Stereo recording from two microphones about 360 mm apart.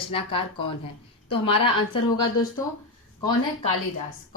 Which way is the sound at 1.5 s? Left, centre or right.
Centre.